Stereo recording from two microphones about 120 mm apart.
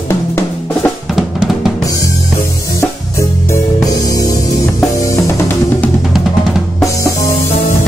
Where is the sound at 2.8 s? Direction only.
25° left (ahead or behind).